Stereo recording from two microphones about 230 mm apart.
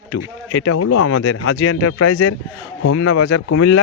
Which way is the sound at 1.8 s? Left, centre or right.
Left.